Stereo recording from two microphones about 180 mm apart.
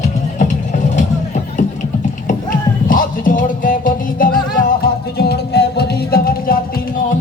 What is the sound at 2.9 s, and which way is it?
Music, 50° left (ahead or behind).